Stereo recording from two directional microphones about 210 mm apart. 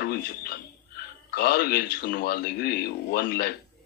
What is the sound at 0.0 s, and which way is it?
Speech, 45° left (ahead or behind).